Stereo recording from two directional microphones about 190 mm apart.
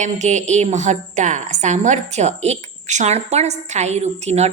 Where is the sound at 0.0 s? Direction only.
35° right (ahead or behind).